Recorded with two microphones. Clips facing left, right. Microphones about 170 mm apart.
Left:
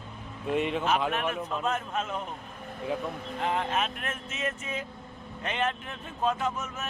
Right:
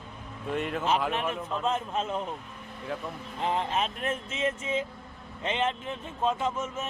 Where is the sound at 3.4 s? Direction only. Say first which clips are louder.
Right 1 dB; 30° right (ahead or behind).